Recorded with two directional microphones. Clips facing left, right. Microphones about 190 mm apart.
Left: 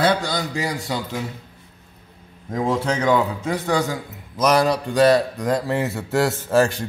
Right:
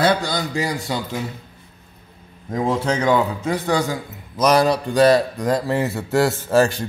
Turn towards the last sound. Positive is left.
turn(degrees=-35)  # may be behind; listen again after turning